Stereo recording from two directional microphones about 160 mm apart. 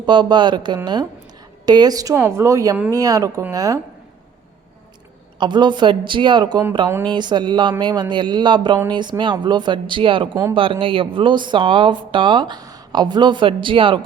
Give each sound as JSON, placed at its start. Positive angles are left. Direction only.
{"t": 0.0, "sound": "speech", "side_deg": -30}
{"t": 5.4, "sound": "speech", "side_deg": -30}